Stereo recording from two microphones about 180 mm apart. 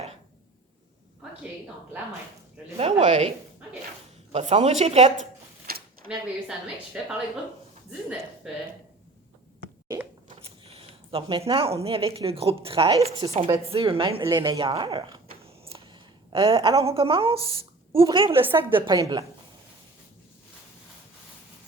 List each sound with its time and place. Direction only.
2.7 s a woman's voice: 40° right (ahead or behind)
5.7 s a sound: 55° right (ahead or behind)
6.1 s a woman's voice: 5° right (ahead or behind)
10.2 s a woman's voice: 35° right (ahead or behind)